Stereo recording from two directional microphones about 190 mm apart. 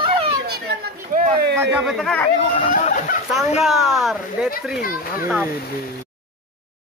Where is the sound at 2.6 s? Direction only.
40° left (ahead or behind).